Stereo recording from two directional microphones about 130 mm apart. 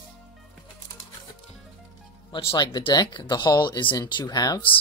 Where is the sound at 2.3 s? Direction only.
40° left (ahead or behind).